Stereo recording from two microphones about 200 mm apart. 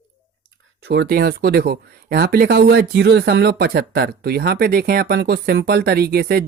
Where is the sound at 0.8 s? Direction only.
55° right (ahead or behind).